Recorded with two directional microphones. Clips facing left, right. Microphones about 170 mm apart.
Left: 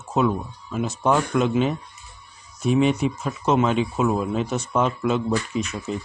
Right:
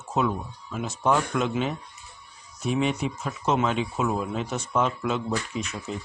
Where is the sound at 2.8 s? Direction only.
15° left (ahead or behind).